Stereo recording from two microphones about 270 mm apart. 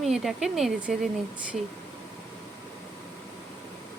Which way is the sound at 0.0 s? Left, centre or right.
Centre.